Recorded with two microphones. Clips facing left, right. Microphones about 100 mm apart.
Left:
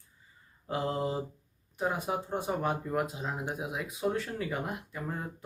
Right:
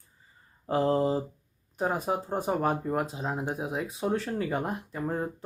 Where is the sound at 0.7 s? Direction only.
35° right (ahead or behind).